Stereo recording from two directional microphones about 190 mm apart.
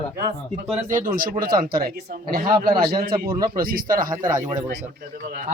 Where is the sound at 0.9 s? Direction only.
45° right (ahead or behind).